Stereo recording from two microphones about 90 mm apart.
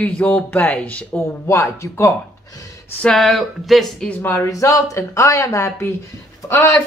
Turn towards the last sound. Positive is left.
turn(degrees=35)  # may be behind; listen again after turning